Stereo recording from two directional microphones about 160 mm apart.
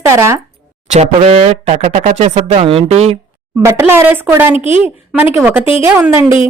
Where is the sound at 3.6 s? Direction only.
15° right (ahead or behind).